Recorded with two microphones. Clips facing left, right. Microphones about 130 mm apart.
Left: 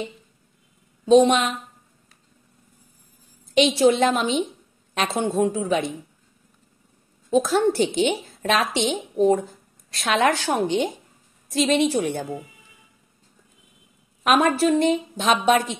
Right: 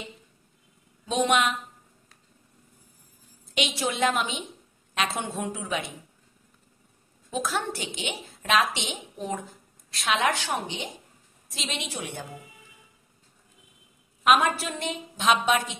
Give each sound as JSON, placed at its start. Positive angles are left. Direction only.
{"t": 1.0, "sound": "a woman's voice", "side_deg": 30}
{"t": 3.5, "sound": "a woman's voice", "side_deg": 35}
{"t": 7.2, "sound": "a woman's voice", "side_deg": 30}
{"t": 14.2, "sound": "a woman's voice", "side_deg": 45}